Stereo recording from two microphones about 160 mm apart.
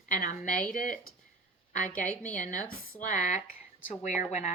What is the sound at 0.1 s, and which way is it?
A woman's voice, 55° left (ahead or behind).